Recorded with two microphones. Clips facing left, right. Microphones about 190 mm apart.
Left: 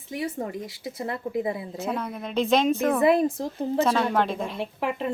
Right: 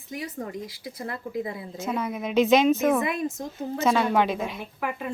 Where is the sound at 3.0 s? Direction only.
30° left (ahead or behind).